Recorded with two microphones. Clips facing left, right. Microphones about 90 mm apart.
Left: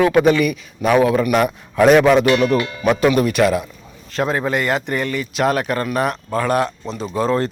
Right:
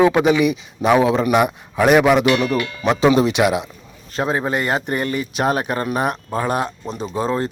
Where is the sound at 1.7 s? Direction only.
5° right (ahead or behind).